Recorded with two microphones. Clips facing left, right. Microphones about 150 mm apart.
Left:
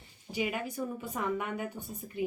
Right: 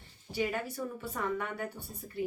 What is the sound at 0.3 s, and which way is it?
A woman's voice, 15° left (ahead or behind).